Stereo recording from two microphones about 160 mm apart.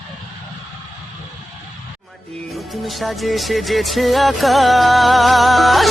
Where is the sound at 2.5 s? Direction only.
Centre (ahead or behind).